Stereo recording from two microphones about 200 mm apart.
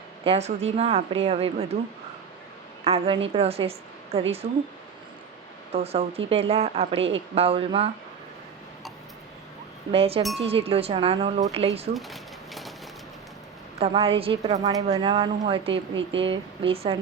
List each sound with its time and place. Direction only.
0.3 s speech: 30° right (ahead or behind)
2.8 s a woman's voice: 30° right (ahead or behind)
5.7 s speech: 30° right (ahead or behind)
9.9 s speech: 30° right (ahead or behind)
11.9 s a sound: centre (ahead or behind)
13.7 s speech: 30° right (ahead or behind)
14.6 s speech: 15° right (ahead or behind)